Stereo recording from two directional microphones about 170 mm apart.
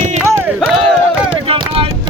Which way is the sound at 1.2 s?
30° right (ahead or behind).